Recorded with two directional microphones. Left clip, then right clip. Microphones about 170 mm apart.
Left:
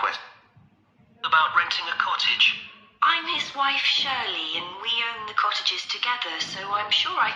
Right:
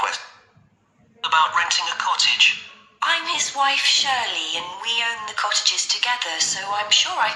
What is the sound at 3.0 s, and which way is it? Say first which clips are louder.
A woman's voice: right 1 dB; 35° right (ahead or behind).